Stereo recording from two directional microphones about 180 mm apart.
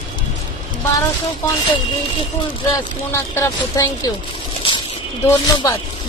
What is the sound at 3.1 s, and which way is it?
A woman's voice, 15° left (ahead or behind).